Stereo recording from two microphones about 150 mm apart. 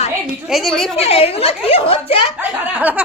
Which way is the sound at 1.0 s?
40° left (ahead or behind).